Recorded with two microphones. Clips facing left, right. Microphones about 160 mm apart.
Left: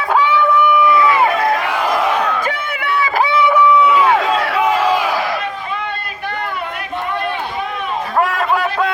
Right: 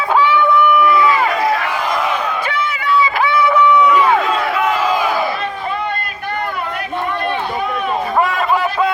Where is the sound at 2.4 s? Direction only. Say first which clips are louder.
Right 1 dB; 50° left (ahead or behind).